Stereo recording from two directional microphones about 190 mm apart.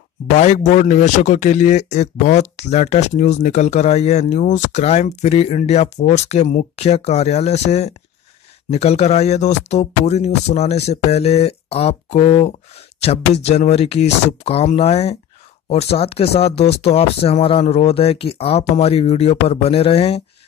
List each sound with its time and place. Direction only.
0.4 s speech: 40° left (ahead or behind)